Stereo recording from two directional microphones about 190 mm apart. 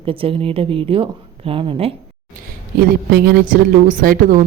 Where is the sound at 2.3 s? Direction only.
45° right (ahead or behind).